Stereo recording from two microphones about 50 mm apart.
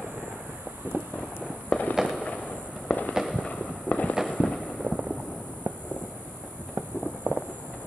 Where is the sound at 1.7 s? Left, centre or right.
Centre.